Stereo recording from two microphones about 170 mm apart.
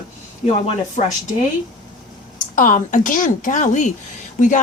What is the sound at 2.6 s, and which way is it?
Speech, 50° left (ahead or behind).